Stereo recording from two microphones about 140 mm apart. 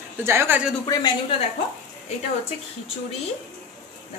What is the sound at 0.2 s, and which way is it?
Speech, 15° right (ahead or behind).